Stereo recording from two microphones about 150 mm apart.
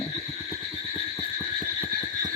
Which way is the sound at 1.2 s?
5° left (ahead or behind).